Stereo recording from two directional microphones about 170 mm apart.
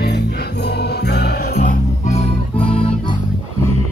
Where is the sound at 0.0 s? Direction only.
70° left (ahead or behind).